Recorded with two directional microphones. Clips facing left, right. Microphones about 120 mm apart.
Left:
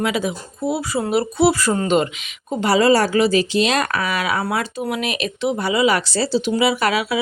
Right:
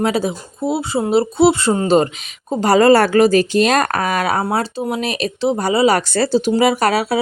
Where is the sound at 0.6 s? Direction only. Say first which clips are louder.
Right 3 dB; 25° right (ahead or behind); by 4.4 s 45° right (ahead or behind).